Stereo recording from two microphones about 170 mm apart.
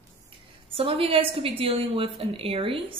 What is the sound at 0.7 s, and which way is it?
A woman's voice, 35° right (ahead or behind).